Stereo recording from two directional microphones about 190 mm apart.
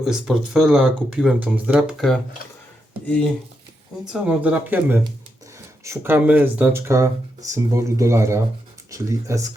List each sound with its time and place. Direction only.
0.0 s speech: 5° right (ahead or behind)
4.0 s speech: 5° right (ahead or behind)